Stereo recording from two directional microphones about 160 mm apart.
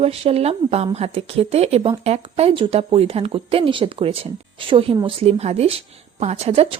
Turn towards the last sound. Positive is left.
turn(degrees=-40)  # may be behind; listen again after turning